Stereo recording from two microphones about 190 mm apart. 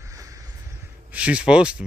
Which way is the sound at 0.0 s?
15° right (ahead or behind).